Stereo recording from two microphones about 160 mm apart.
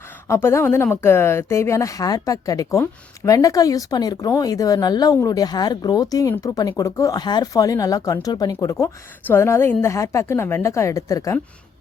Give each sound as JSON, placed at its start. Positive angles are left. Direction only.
{"t": 0.3, "sound": "speech", "side_deg": 15}